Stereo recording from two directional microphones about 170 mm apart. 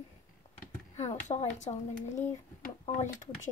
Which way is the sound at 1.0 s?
45° left (ahead or behind).